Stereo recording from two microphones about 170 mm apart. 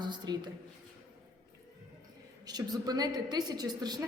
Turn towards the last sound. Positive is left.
turn(degrees=-25)  # may be behind; listen again after turning